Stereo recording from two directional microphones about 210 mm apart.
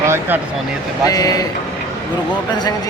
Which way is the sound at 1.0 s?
15° left (ahead or behind).